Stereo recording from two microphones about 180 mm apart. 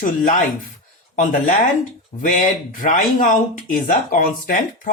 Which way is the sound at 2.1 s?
40° left (ahead or behind).